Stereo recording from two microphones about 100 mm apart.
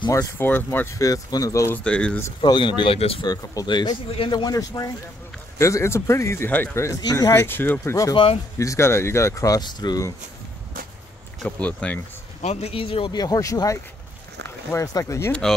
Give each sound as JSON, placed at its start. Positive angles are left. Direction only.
{"t": 0.4, "sound": "speech", "side_deg": 20}
{"t": 1.7, "sound": "speech", "side_deg": 10}
{"t": 2.4, "sound": "a man's voice", "side_deg": 50}
{"t": 3.0, "sound": "speech", "side_deg": 70}
{"t": 3.3, "sound": "speech", "side_deg": 45}
{"t": 7.9, "sound": "speech", "side_deg": 35}
{"t": 11.4, "sound": "speech", "side_deg": 15}
{"t": 12.4, "sound": "speech", "side_deg": 90}
{"t": 13.1, "sound": "speech", "side_deg": 40}